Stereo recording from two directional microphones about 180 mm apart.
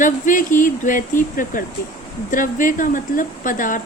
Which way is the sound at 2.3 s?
45° left (ahead or behind).